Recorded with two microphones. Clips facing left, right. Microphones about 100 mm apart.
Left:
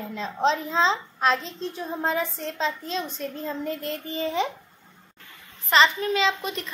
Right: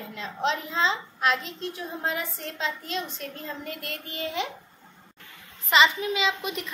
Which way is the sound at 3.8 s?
30° left (ahead or behind).